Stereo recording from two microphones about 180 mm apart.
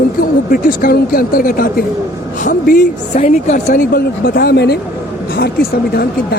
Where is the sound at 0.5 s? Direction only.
55° left (ahead or behind).